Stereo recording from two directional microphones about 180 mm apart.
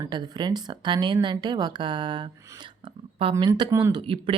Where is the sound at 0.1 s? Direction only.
25° right (ahead or behind).